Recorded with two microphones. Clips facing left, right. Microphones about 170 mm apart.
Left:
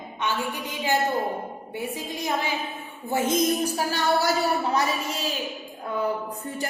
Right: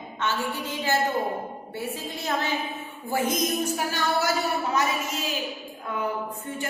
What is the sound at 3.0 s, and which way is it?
A woman's voice, 25° left (ahead or behind).